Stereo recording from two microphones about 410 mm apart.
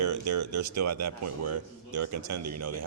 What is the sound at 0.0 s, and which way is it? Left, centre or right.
Speech, right.